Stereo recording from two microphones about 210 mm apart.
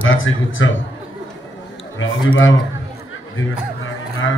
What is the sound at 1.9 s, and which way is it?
Speech, 70° left (ahead or behind).